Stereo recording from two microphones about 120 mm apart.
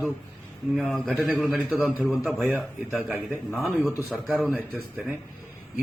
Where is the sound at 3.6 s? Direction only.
Centre (ahead or behind).